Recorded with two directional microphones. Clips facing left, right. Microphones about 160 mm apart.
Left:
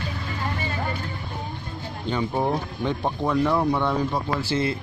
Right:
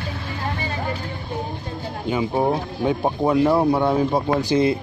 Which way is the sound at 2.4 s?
30° right (ahead or behind).